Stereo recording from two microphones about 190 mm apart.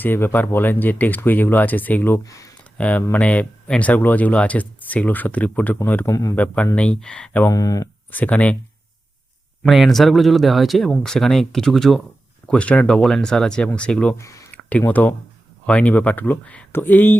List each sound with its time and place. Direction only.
0.0 s speech: 10° left (ahead or behind)
7.5 s speech: 20° left (ahead or behind)
8.1 s speech: 10° left (ahead or behind)
9.6 s speech: centre (ahead or behind)